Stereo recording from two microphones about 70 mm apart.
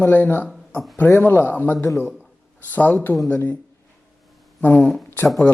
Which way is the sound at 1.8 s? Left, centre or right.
Left.